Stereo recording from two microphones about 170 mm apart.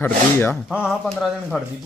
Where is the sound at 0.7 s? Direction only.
Centre (ahead or behind).